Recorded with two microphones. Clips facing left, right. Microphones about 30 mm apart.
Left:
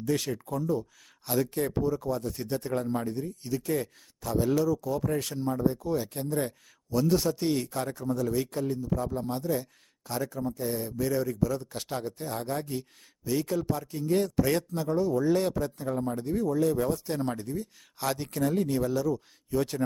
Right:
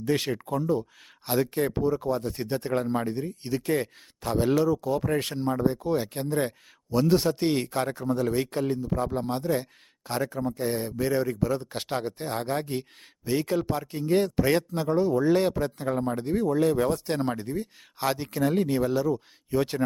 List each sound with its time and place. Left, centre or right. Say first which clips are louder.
0.0 s speech: right 3 dB; right
17.4 s speech: right 3 dB; right
18.0 s speech: right 3 dB; right
18.4 s speech: right 3 dB; right